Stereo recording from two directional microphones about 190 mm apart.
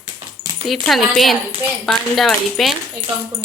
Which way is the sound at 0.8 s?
Centre (ahead or behind).